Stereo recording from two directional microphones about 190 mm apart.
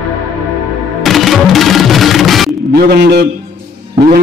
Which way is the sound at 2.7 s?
55° right (ahead or behind).